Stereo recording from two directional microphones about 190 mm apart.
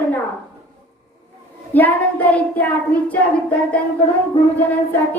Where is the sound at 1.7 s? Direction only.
10° left (ahead or behind).